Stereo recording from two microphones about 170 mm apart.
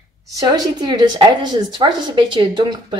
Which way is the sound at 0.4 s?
25° right (ahead or behind).